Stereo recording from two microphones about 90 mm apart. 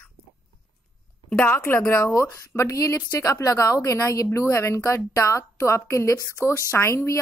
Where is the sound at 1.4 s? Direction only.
25° left (ahead or behind).